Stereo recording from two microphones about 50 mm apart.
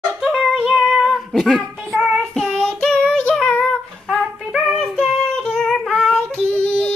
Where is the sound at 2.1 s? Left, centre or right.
Centre.